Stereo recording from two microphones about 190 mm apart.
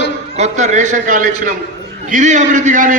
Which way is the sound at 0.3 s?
35° right (ahead or behind).